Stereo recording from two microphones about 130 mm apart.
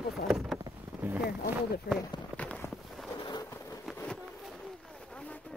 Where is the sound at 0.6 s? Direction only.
25° right (ahead or behind).